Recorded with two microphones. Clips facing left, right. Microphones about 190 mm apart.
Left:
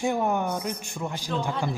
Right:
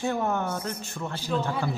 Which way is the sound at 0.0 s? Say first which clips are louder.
Left 2 dB; 15° left (ahead or behind).